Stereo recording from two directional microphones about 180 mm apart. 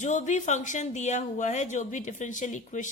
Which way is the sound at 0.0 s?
40° left (ahead or behind).